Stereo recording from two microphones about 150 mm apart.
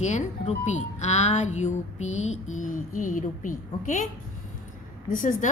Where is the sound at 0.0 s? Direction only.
50° left (ahead or behind).